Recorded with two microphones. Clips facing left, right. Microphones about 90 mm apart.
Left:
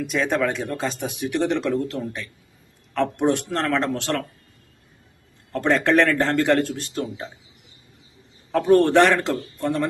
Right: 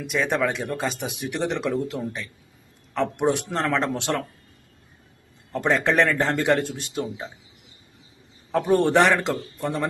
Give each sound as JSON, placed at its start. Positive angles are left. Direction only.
{"t": 0.0, "sound": "a man's voice", "side_deg": 0}
{"t": 5.5, "sound": "a man's voice", "side_deg": -10}
{"t": 8.5, "sound": "a man's voice", "side_deg": -5}